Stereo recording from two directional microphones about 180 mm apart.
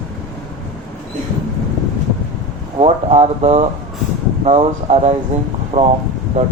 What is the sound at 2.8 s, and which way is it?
Speech, 35° right (ahead or behind).